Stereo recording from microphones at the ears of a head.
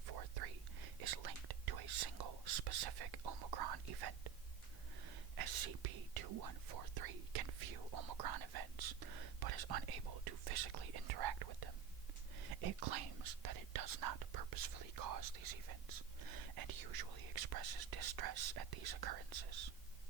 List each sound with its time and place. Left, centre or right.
0.0 s whispering: right